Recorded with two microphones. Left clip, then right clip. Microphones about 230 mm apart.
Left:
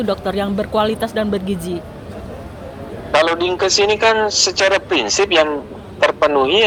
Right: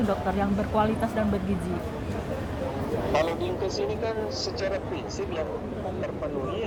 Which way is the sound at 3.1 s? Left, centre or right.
Left.